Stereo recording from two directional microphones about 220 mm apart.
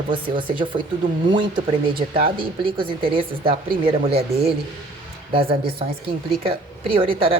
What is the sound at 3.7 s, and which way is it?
Speech, 45° right (ahead or behind).